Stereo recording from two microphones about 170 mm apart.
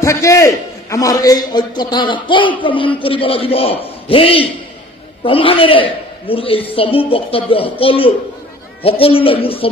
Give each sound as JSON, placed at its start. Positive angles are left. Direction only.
{"t": 0.0, "sound": "a man's voice", "side_deg": 20}